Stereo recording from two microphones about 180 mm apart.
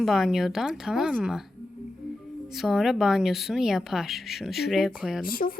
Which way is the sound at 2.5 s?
Centre (ahead or behind).